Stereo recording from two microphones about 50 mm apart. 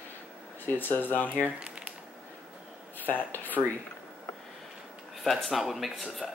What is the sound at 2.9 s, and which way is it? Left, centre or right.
Speech, left.